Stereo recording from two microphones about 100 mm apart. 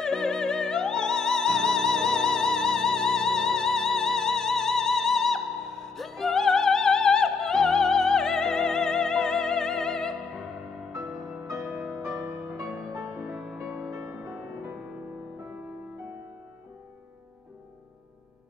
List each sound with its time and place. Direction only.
0.0 s music: 5° left (ahead or behind)
12.7 s music: 35° right (ahead or behind)
13.1 s music: centre (ahead or behind)